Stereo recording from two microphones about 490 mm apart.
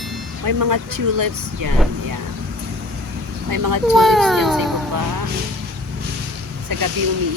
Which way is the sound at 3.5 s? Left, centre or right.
Right.